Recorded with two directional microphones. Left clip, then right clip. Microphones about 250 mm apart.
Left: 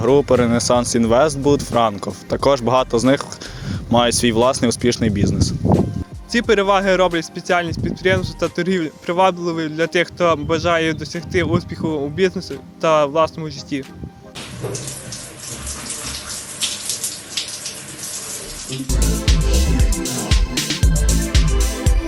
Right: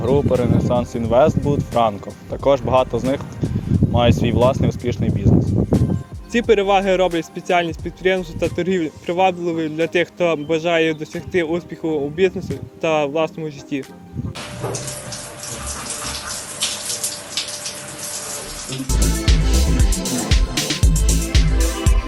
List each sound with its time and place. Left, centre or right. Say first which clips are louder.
0.0 s speech: left 3 dB; left
6.3 s a man's voice: even; left
18.9 s music: even; centre